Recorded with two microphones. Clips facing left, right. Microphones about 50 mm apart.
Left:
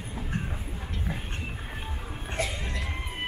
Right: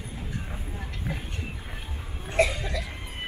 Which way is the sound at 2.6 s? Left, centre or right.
Left.